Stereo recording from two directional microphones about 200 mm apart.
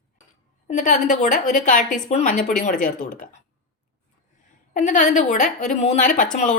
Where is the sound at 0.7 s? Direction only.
40° left (ahead or behind).